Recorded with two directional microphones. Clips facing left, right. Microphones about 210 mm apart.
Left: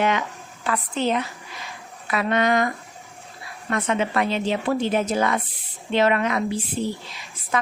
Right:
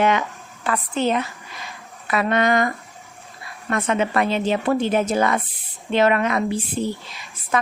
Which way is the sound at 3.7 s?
50° right (ahead or behind).